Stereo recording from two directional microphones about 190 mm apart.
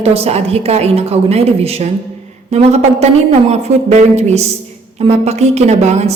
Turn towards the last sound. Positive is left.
turn(degrees=-35)  # may be behind; listen again after turning